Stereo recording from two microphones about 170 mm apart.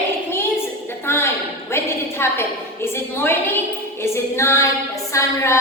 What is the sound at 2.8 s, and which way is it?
Music, 15° left (ahead or behind).